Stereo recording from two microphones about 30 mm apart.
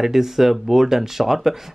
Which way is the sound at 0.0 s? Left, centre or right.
Centre.